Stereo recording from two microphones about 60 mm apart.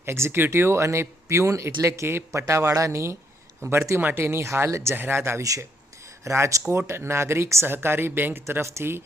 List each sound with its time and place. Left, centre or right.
0.0 s speech: right
3.6 s a man's voice: right
5.4 s speech: right
6.2 s speech: right